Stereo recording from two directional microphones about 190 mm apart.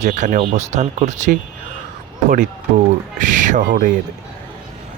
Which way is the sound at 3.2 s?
40° right (ahead or behind).